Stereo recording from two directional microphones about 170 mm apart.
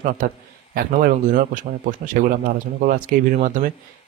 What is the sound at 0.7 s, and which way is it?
Speech, 55° right (ahead or behind).